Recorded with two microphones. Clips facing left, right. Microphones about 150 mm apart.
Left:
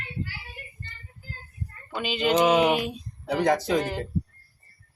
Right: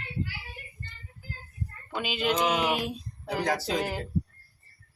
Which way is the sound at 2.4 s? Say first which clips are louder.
Left 10 dB; 45° left (ahead or behind).